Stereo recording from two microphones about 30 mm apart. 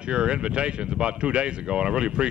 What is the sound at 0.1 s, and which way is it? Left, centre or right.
Speech, right.